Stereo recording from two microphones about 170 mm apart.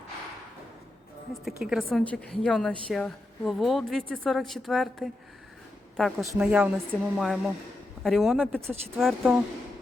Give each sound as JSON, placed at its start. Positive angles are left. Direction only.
{"t": 1.3, "sound": "a woman's voice", "side_deg": 0}